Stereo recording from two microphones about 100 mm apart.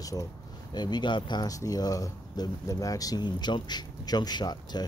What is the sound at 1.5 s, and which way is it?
Speech, 35° left (ahead or behind).